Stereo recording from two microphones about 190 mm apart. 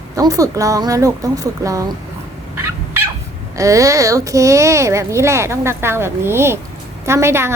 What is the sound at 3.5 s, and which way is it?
A child's voice, 15° right (ahead or behind).